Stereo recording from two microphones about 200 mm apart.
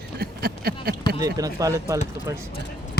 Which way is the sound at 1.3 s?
15° right (ahead or behind).